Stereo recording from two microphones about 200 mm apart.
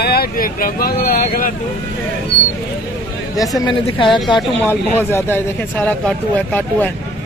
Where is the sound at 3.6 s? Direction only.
25° left (ahead or behind).